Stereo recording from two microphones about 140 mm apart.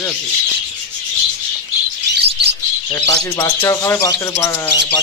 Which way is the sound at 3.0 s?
25° left (ahead or behind).